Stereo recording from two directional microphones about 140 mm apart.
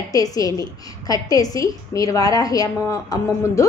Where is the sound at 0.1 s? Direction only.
25° left (ahead or behind).